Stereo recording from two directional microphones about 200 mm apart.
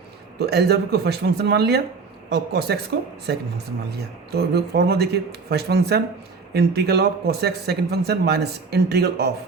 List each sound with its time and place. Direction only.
0.3 s speech: 55° right (ahead or behind)